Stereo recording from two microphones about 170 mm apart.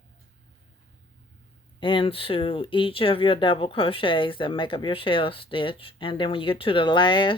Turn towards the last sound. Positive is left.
turn(degrees=30)  # may be behind; listen again after turning